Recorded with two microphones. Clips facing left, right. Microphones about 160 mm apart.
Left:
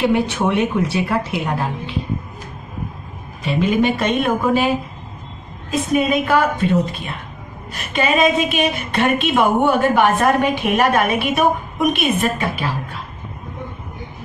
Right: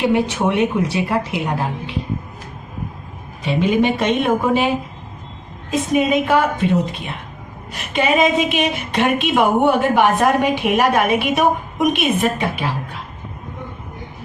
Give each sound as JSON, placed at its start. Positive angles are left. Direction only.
{"t": 0.0, "sound": "a woman's voice", "side_deg": -15}
{"t": 3.4, "sound": "a woman's voice", "side_deg": -15}
{"t": 5.7, "sound": "a woman's voice", "side_deg": -20}
{"t": 7.7, "sound": "a woman's voice", "side_deg": -15}